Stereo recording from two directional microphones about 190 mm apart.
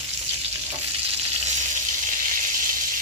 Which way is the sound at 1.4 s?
40° right (ahead or behind).